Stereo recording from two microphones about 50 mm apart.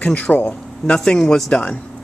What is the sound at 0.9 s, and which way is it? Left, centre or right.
Speech, centre.